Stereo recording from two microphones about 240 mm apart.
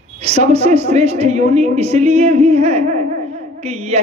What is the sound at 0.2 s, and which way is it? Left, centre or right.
A woman's voice, right.